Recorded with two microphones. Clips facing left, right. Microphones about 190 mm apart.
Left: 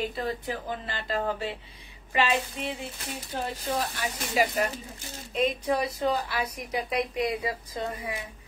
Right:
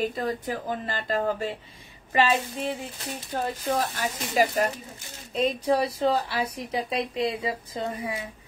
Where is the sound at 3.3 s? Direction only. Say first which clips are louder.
Right 3 dB; 45° right (ahead or behind); by 8.2 s 25° right (ahead or behind).